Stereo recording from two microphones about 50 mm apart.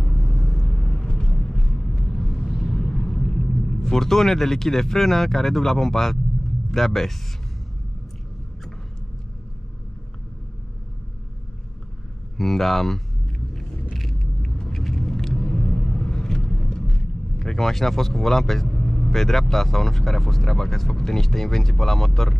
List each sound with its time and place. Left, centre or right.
0.0 s vehicle: centre
0.7 s vehicle: centre
2.4 s vehicle: centre
2.7 s speech: centre
12.4 s speech: centre
13.9 s vehicle: centre
17.4 s speech: centre